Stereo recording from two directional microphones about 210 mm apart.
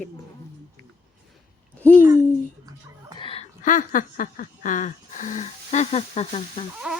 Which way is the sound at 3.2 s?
30° left (ahead or behind).